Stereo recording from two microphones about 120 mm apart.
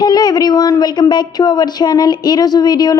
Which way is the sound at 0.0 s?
35° left (ahead or behind).